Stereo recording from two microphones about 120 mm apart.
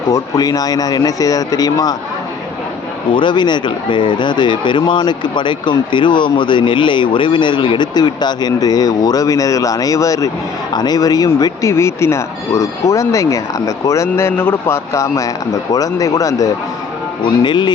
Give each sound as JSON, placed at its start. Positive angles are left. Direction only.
{"t": 0.1, "sound": "speech", "side_deg": 30}
{"t": 3.1, "sound": "speech", "side_deg": 40}
{"t": 17.2, "sound": "speech", "side_deg": 40}